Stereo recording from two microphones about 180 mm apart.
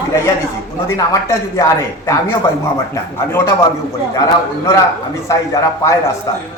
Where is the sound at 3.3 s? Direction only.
15° left (ahead or behind).